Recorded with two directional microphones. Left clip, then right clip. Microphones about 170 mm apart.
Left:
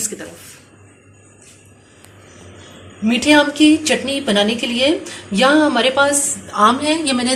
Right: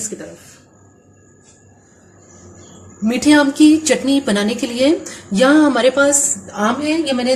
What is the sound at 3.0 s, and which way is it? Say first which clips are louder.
A woman's voice: even; 60° right (ahead or behind).